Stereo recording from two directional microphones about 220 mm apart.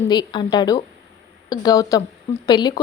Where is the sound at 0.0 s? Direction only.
20° left (ahead or behind).